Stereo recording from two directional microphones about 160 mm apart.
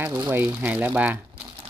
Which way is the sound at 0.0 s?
15° right (ahead or behind).